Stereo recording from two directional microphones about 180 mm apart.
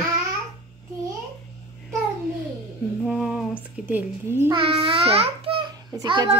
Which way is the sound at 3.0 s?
Centre (ahead or behind).